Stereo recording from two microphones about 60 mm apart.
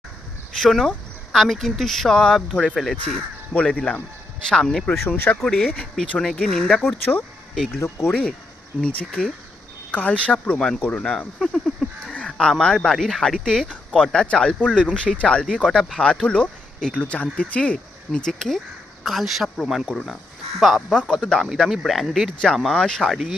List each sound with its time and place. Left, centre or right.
0.6 s speech: centre
3.5 s speech: centre
4.9 s speech: left
5.5 s speech: centre
6.8 s speech: left
8.9 s speech: left
11.3 s livestock: centre
12.2 s speech: centre
15.6 s speech: centre
16.2 s speech: centre
21.2 s speech: centre
21.7 s speech: centre
22.7 s speech: centre